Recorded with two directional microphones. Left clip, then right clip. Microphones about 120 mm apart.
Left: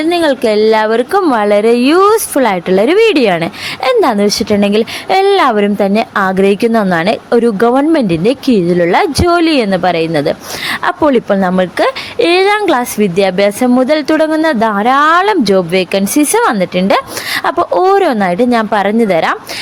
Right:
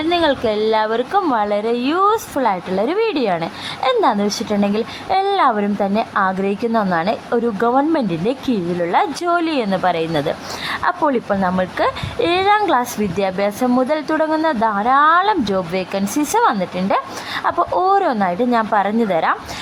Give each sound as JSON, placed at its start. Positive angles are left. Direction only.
{"t": 0.0, "sound": "a woman's voice", "side_deg": 30}